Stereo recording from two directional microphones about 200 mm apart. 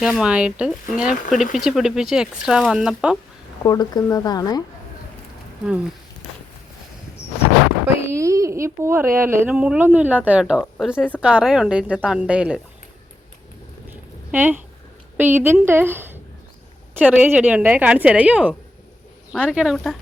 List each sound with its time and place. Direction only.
0.0 s speech: 5° right (ahead or behind)
3.6 s speech: 20° left (ahead or behind)
5.6 s speech: 5° right (ahead or behind)
8.1 s speech: 15° right (ahead or behind)
13.9 s a sound: 10° right (ahead or behind)
15.2 s speech: 10° right (ahead or behind)